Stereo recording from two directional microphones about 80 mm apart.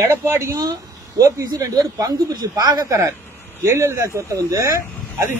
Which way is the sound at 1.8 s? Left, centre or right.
Right.